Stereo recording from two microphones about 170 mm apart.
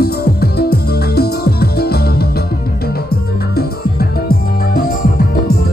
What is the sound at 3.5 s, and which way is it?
Music, 65° left (ahead or behind).